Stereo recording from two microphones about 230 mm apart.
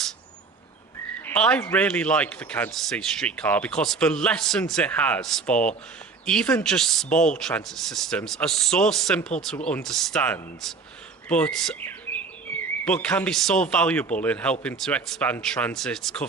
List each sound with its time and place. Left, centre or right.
1.2 s a sound: centre
1.7 s rub: centre
11.3 s speech: centre
14.6 s rub: centre